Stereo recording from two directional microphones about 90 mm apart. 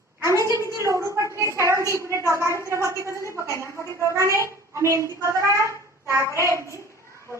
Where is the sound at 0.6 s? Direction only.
35° right (ahead or behind).